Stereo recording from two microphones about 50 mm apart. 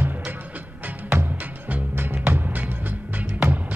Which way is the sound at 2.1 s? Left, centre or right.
Right.